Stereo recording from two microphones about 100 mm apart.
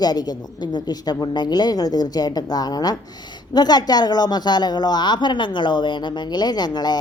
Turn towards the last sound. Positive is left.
turn(degrees=45)  # may be behind; listen again after turning